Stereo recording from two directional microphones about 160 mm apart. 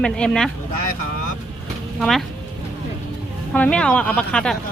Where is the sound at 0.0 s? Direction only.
5° left (ahead or behind).